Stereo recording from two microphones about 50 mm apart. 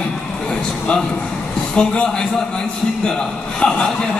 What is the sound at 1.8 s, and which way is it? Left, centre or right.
Speech, centre.